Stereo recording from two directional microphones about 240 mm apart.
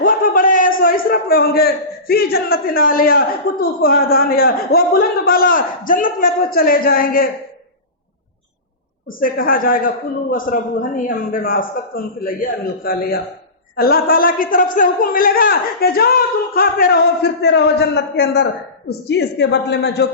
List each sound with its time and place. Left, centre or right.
0.0 s a man's voice: left
9.2 s a man's voice: left